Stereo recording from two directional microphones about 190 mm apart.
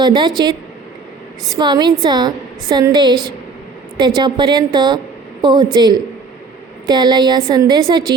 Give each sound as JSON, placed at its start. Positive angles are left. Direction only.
{"t": 0.0, "sound": "a woman's voice", "side_deg": -25}
{"t": 1.5, "sound": "a woman's voice", "side_deg": -20}